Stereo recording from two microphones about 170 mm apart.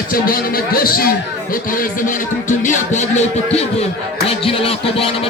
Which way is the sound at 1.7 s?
55° left (ahead or behind).